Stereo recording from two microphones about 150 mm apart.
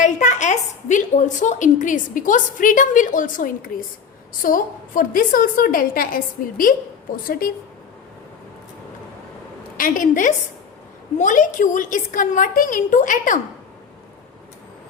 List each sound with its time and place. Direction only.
0.0 s a woman's voice: 55° left (ahead or behind); by 7.5 s 70° left (ahead or behind)
9.7 s a woman's voice: 65° left (ahead or behind)